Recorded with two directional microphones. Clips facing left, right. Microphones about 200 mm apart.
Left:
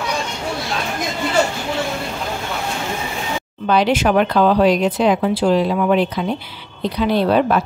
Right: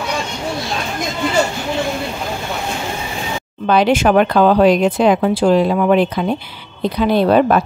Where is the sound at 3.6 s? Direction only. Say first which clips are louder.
Right 3 dB; 50° right (ahead or behind).